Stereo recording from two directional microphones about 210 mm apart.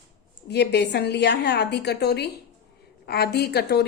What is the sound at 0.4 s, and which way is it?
A woman's voice, 55° left (ahead or behind).